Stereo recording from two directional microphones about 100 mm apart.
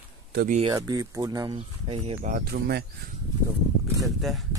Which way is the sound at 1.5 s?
90° right.